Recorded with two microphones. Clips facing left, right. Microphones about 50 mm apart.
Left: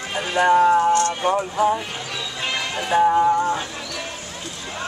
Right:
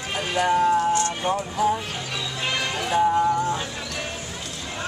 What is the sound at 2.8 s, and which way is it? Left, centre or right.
Music, centre.